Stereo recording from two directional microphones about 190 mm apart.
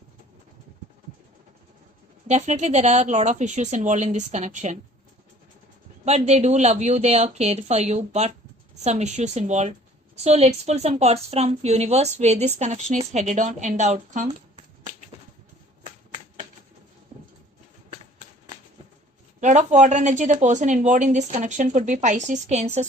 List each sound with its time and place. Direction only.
2.2 s a woman's voice: 35° right (ahead or behind)
6.1 s a woman's voice: 35° right (ahead or behind)
19.4 s a woman's voice: 40° right (ahead or behind)